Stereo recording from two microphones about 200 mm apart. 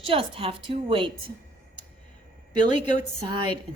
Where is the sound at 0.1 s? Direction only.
30° right (ahead or behind).